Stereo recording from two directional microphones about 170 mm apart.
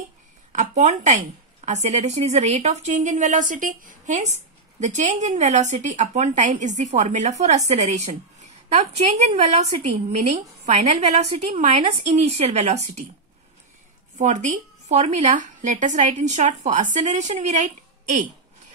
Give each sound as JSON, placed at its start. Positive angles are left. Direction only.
{"t": 0.5, "sound": "a woman's voice", "side_deg": -45}
{"t": 14.1, "sound": "a woman's voice", "side_deg": -45}